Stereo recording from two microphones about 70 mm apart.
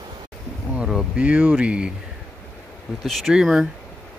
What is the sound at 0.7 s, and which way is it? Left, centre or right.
Speech, centre.